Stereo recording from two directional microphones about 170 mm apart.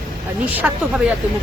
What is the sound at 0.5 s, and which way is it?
Speech, 10° right (ahead or behind).